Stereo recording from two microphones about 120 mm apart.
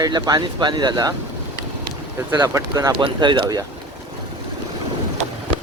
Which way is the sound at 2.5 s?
30° right (ahead or behind).